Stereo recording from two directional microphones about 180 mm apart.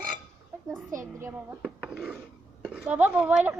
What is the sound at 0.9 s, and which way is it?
A woman's voice, 15° right (ahead or behind).